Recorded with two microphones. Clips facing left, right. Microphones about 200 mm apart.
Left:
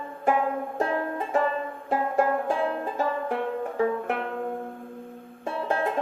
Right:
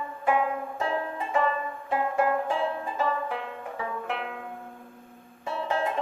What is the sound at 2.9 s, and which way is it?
Music, 45° left (ahead or behind).